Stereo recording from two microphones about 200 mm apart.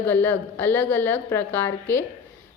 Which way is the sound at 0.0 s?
10° left (ahead or behind).